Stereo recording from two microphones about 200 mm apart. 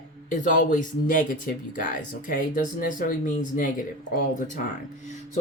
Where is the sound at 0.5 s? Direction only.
40° left (ahead or behind).